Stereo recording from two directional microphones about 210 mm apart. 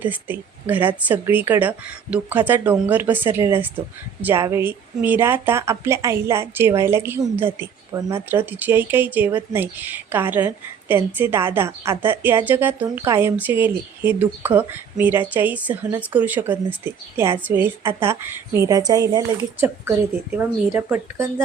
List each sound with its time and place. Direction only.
0.0 s speech: 10° right (ahead or behind)